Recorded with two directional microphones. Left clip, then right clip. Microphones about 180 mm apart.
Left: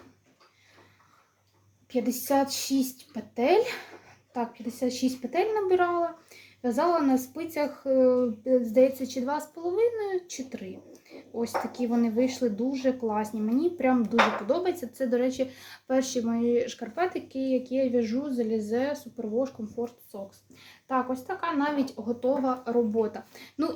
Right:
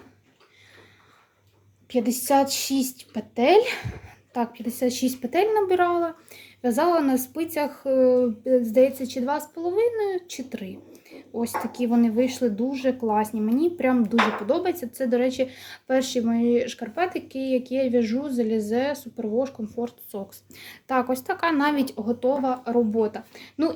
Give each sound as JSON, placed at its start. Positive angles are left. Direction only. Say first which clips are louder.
{"t": 1.9, "sound": "speech", "louder": "right 5 dB", "side_deg": -25}
{"t": 20.1, "sound": "speech", "louder": "right 5 dB", "side_deg": -40}
{"t": 20.8, "sound": "speech", "louder": "right 5 dB", "side_deg": -55}
{"t": 22.2, "sound": "speech", "louder": "right 3 dB", "side_deg": -25}